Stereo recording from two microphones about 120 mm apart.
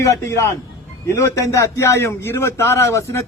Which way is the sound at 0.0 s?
25° left (ahead or behind).